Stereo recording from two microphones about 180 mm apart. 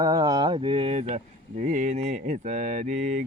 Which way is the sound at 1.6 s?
45° right (ahead or behind).